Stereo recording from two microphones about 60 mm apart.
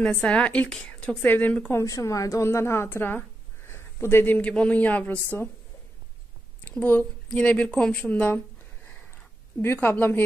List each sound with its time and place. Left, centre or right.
0.2 s a man's voice: centre
1.7 s speech: left
2.4 s a woman's voice: left
4.4 s a man's voice: left
5.3 s speech: left
6.8 s speech: left
7.3 s speech: centre
7.9 s speech: left
9.8 s speech: left